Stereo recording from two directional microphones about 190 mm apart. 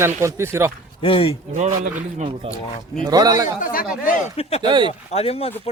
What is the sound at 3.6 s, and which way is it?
Speech, 45° left (ahead or behind).